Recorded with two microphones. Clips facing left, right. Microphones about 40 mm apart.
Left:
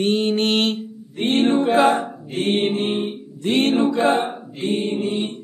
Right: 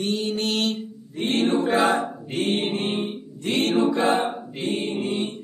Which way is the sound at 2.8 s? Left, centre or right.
Left.